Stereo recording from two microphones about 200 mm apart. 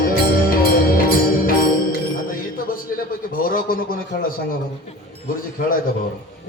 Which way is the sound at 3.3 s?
45° left (ahead or behind).